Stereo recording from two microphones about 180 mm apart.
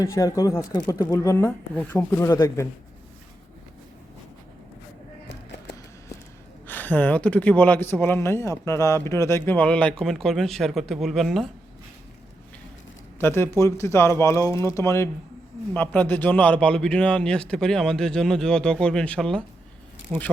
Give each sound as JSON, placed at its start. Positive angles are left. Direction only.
{"t": 0.0, "sound": "speech", "side_deg": 20}
{"t": 5.3, "sound": "music", "side_deg": 75}
{"t": 6.7, "sound": "speech", "side_deg": 10}
{"t": 13.1, "sound": "a man's voice", "side_deg": 10}